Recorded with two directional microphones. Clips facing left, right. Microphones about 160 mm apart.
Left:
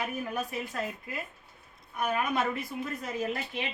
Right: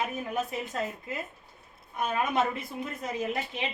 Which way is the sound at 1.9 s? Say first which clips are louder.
Right 2 dB; 20° right (ahead or behind).